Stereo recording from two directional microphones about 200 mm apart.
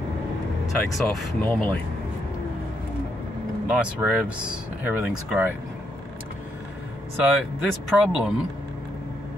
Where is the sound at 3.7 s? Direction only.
5° right (ahead or behind).